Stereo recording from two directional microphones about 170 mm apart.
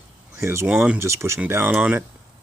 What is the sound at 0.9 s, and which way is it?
Speech, 15° right (ahead or behind).